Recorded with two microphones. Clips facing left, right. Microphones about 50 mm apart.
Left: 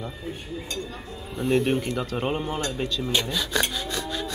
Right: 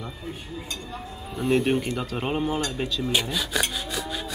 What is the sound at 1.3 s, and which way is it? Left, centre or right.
Speech, centre.